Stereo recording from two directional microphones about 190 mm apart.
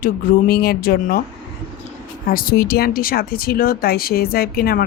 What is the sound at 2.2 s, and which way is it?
Speech, 50° left (ahead or behind).